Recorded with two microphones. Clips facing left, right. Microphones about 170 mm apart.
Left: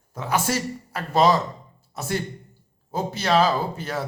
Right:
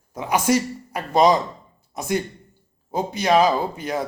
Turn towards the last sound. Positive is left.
turn(degrees=-15)  # may be behind; listen again after turning